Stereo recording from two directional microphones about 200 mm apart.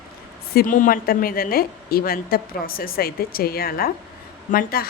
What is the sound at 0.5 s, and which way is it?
A woman's voice, 45° left (ahead or behind).